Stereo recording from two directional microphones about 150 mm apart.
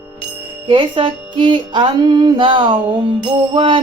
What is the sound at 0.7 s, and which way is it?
Music, 35° right (ahead or behind).